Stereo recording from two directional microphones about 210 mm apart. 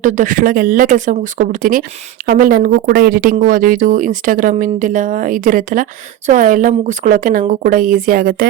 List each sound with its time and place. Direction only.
0.0 s speech: 35° right (ahead or behind)